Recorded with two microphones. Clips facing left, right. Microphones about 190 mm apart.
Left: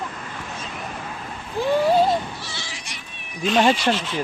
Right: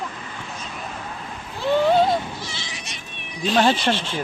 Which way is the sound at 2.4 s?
20° right (ahead or behind).